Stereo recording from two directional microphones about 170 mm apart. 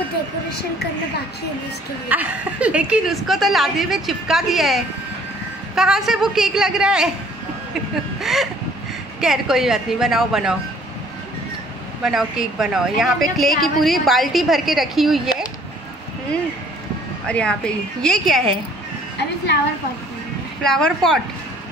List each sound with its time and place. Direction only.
2.0 s a woman's voice: 10° right (ahead or behind)
8.2 s a sound: centre (ahead or behind)
9.2 s a woman's voice: 5° right (ahead or behind)
12.0 s a woman's voice: centre (ahead or behind)
17.3 s a woman's voice: 5° left (ahead or behind)
19.1 s a woman's voice: 85° left
20.6 s a woman's voice: 5° left (ahead or behind)